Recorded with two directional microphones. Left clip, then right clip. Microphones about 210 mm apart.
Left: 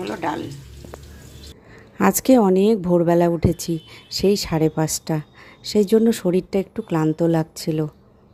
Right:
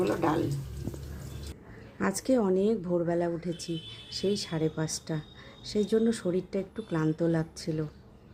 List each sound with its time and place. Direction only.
0.0 s speech: centre (ahead or behind)
2.0 s speech: 40° left (ahead or behind)